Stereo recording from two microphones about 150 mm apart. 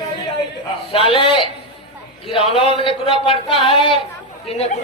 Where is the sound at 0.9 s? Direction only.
40° left (ahead or behind).